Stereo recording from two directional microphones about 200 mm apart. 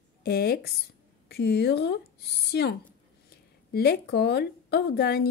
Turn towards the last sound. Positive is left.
turn(degrees=50)  # may be behind; listen again after turning